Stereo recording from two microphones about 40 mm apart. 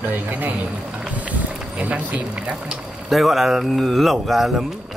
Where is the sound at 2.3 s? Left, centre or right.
Right.